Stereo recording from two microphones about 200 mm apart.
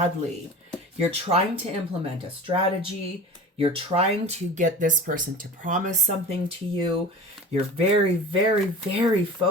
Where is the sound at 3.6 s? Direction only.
30° right (ahead or behind).